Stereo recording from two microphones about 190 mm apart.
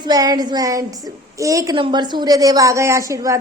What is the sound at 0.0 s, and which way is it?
A woman's voice, 20° right (ahead or behind).